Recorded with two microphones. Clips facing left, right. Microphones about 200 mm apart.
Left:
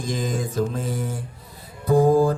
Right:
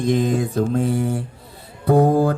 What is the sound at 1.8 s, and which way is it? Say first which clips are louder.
Mantra: right 1 dB; 65° right (ahead or behind).